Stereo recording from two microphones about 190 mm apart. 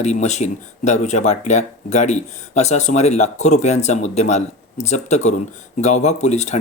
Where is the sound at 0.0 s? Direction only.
35° left (ahead or behind).